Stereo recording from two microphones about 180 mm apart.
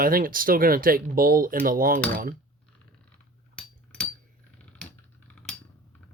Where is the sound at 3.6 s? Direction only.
5° left (ahead or behind).